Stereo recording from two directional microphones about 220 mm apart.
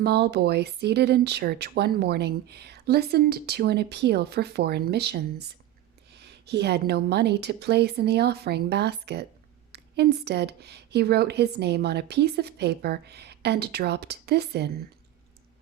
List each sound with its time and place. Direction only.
0.0 s speech: 50° right (ahead or behind)